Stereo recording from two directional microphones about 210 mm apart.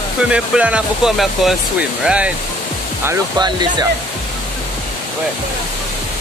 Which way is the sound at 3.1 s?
20° right (ahead or behind).